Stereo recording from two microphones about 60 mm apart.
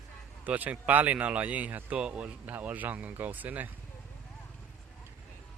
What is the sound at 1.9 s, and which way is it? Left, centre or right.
Speech, centre.